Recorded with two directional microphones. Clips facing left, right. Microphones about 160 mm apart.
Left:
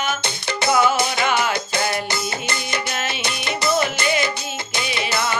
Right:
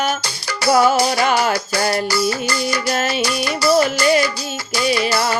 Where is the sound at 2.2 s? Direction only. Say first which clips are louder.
Right 7 dB; 25° left (ahead or behind).